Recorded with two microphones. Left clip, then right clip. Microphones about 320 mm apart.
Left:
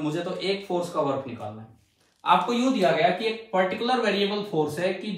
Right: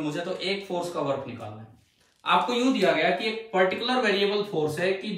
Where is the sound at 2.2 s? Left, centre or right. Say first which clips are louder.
Left 1 dB; centre.